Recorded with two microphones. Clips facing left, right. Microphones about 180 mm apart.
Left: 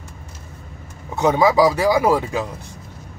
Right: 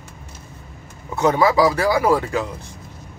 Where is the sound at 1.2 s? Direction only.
15° left (ahead or behind).